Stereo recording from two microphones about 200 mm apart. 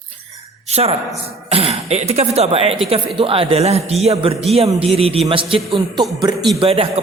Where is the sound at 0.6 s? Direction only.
30° right (ahead or behind).